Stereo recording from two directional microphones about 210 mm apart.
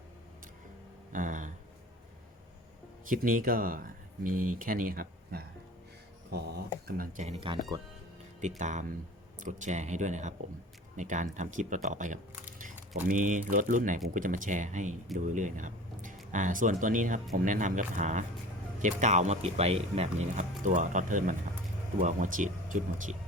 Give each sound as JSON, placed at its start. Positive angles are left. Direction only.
{"t": 1.1, "sound": "a sound", "side_deg": -40}
{"t": 3.1, "sound": "speech", "side_deg": -40}
{"t": 6.8, "sound": "speech", "side_deg": -45}
{"t": 8.4, "sound": "speech", "side_deg": -35}